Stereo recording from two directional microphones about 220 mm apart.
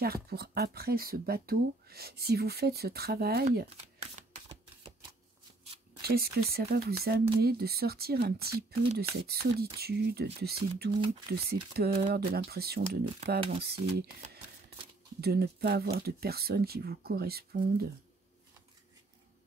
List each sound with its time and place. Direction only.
0.0 s speech: 45° right (ahead or behind)
6.0 s speech: 45° right (ahead or behind)